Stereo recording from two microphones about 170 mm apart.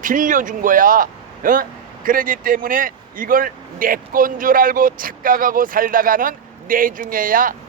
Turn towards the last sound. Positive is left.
turn(degrees=-55)  # may be behind; listen again after turning